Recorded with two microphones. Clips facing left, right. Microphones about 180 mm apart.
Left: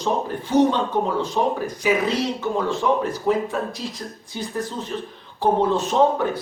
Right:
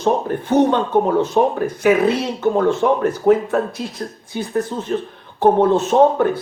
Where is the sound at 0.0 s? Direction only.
55° right (ahead or behind).